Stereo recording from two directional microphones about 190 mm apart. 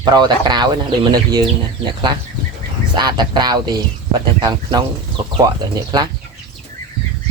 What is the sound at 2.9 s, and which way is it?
Speech, 25° right (ahead or behind).